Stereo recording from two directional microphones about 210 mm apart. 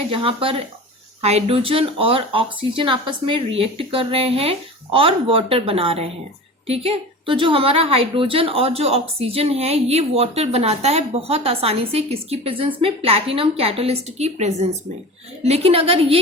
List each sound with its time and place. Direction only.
0.1 s a woman's voice: 25° right (ahead or behind)